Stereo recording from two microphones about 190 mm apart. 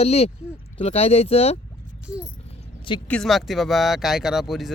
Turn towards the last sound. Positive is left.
turn(degrees=0)  # may be behind; listen again after turning